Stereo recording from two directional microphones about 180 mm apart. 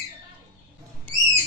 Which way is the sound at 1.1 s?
10° left (ahead or behind).